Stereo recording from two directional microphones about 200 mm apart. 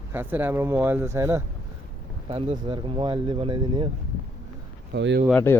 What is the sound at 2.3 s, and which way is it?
Speech, 30° right (ahead or behind).